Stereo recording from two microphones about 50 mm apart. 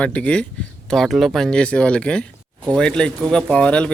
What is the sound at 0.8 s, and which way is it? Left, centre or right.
Speech, centre.